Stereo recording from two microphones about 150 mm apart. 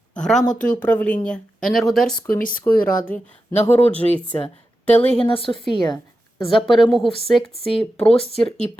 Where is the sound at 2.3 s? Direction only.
65° left (ahead or behind).